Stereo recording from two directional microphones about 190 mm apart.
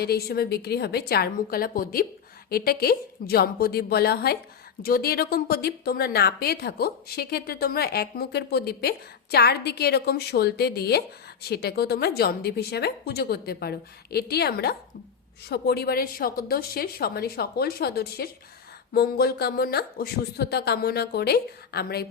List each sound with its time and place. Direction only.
0.0 s a woman's voice: 55° left (ahead or behind)